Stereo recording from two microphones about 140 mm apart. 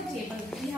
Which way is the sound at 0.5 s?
Centre (ahead or behind).